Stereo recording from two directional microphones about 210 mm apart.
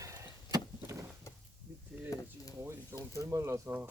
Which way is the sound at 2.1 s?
15° left (ahead or behind).